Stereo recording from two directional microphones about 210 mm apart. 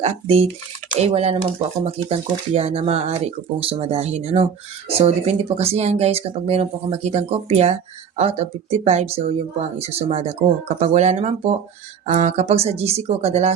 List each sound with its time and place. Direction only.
0.0 s speech: 30° right (ahead or behind)